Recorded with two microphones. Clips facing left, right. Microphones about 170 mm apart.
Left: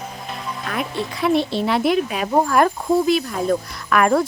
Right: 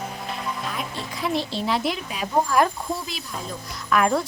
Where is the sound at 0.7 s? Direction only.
65° left (ahead or behind).